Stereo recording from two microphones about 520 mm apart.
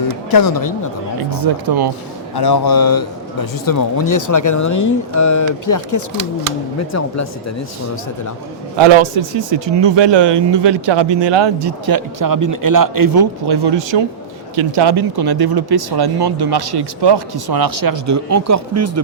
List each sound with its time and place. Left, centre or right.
0.3 s speech: left
1.3 s speech: right
2.3 s speech: left
8.7 s speech: right